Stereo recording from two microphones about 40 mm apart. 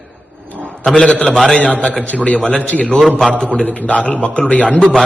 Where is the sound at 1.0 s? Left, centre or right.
Left.